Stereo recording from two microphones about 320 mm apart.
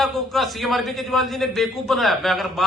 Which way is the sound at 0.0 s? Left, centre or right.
Centre.